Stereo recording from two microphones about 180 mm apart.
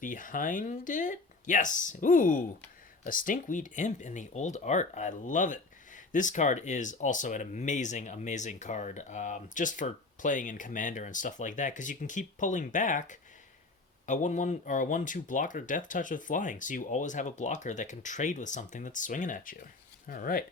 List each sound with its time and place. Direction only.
0.0 s speech: 45° left (ahead or behind)